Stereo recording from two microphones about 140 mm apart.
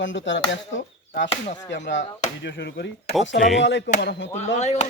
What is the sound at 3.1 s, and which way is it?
Speech, centre (ahead or behind).